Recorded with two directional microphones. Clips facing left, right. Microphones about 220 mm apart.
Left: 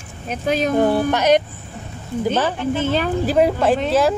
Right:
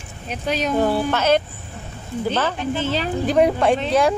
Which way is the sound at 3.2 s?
5° left (ahead or behind).